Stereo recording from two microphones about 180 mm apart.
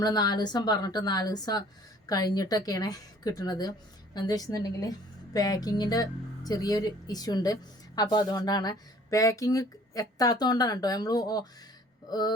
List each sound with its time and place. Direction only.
0.0 s a woman's voice: 20° left (ahead or behind)